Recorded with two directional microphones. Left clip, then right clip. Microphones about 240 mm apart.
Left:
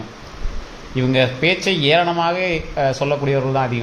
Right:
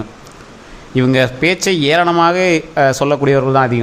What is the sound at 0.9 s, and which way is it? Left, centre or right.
A man's voice, right.